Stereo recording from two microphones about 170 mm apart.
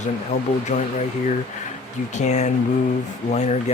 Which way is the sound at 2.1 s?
45° left (ahead or behind).